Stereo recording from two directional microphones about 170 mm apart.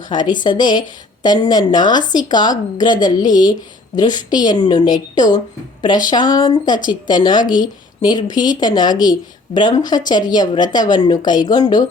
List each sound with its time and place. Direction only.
0.1 s a woman's voice: 25° left (ahead or behind)